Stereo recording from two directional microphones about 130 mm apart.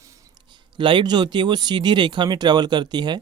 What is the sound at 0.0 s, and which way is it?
Speech, 25° right (ahead or behind).